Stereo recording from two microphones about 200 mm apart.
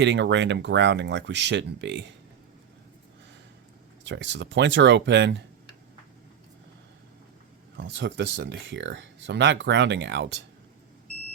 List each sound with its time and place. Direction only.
0.0 s speech: 60° right (ahead or behind)
4.0 s speech: 65° right (ahead or behind)
7.8 s speech: 65° right (ahead or behind)